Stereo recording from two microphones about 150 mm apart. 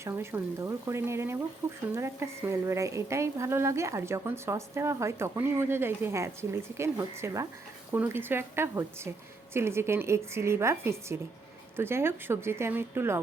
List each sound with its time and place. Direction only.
0.0 s a woman's voice: 15° right (ahead or behind)